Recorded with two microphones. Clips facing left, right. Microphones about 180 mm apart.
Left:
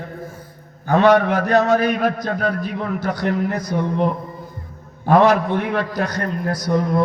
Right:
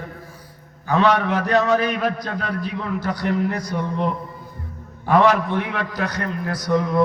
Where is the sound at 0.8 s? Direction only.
50° left (ahead or behind).